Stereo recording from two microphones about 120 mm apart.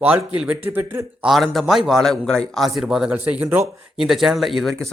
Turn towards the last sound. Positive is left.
turn(degrees=0)  # may be behind; listen again after turning